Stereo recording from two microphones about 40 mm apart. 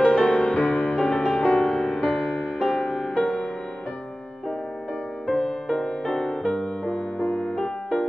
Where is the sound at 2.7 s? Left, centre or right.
Centre.